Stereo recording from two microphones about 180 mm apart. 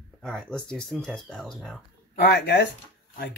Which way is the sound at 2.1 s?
65° left (ahead or behind).